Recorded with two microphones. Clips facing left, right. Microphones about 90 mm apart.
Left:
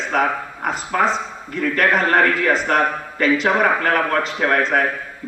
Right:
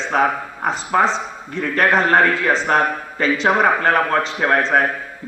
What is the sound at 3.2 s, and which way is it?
Speech, 30° right (ahead or behind).